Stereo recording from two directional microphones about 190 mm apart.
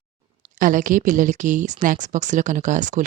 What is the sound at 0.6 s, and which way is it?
Speech, 45° right (ahead or behind).